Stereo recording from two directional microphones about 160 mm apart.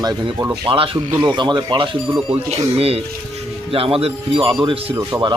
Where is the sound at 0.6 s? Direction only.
35° right (ahead or behind).